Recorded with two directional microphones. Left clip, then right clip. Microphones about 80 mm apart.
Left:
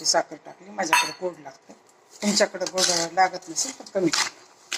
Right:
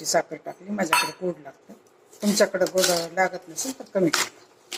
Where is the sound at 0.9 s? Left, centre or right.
Right.